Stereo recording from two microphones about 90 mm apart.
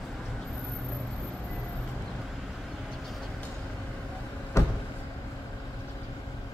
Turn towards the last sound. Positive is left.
turn(degrees=35)  # may be behind; listen again after turning